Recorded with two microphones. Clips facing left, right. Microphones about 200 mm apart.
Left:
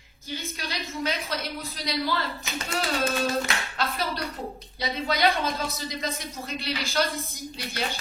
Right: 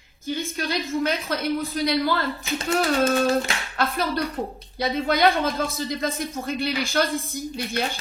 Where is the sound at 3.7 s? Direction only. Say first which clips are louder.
Right 8 dB; 50° right (ahead or behind).